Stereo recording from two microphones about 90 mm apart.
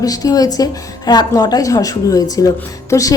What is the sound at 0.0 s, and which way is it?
A woman's voice, 45° left (ahead or behind).